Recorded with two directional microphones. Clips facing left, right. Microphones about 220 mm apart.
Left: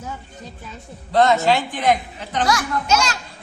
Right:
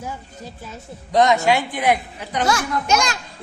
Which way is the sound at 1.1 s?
15° right (ahead or behind).